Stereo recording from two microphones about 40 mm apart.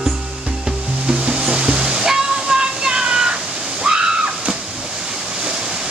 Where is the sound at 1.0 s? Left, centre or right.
Right.